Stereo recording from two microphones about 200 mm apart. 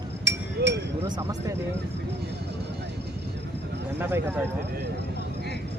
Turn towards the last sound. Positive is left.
turn(degrees=-10)  # may be behind; listen again after turning